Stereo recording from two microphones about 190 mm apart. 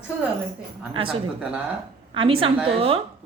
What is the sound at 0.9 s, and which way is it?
Speech, 30° right (ahead or behind).